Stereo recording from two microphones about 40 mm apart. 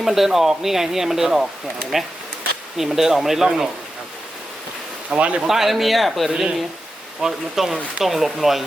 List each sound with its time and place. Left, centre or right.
0.0 s speech: centre
5.1 s speech: right
5.5 s speech: centre
6.3 s speech: centre